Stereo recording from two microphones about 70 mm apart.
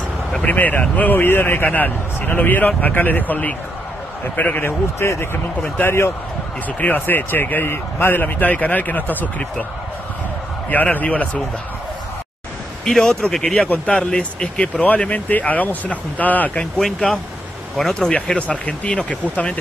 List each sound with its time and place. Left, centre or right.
0.3 s a man's voice: left
10.7 s speech: left
12.8 s speech: centre
16.8 s speech: centre
17.9 s speech: centre